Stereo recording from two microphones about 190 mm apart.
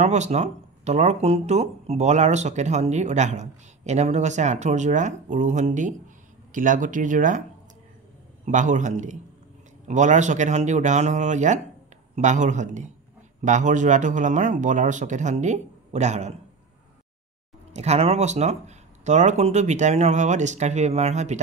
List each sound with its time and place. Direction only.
0.0 s speech: 35° right (ahead or behind)
8.5 s speech: 40° right (ahead or behind)
17.7 s speech: 35° right (ahead or behind)